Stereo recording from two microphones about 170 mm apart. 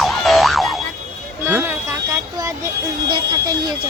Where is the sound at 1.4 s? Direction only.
10° right (ahead or behind).